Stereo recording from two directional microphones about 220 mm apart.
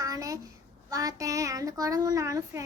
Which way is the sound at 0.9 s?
15° right (ahead or behind).